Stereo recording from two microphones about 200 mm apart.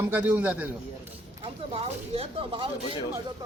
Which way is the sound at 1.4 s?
30° right (ahead or behind).